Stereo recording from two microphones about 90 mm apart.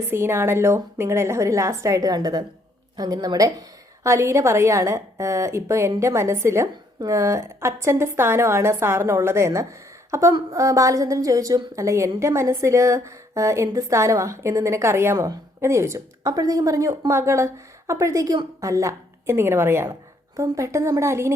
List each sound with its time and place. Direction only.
0.1 s a woman's voice: 30° right (ahead or behind)
16.3 s a woman's voice: 40° right (ahead or behind)
19.9 s speech: 40° right (ahead or behind)